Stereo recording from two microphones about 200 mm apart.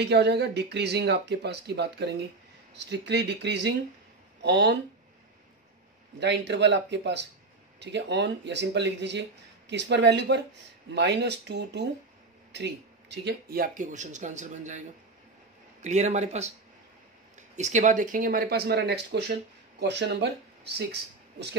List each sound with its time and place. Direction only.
0.0 s speech: 55° right (ahead or behind)
6.1 s speech: 60° right (ahead or behind); by 14.8 s 35° right (ahead or behind)
15.8 s speech: 35° right (ahead or behind); by 21.5 s 55° right (ahead or behind)